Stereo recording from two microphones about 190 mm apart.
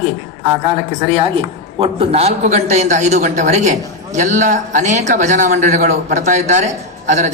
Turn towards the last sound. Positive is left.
turn(degrees=-40)  # may be behind; listen again after turning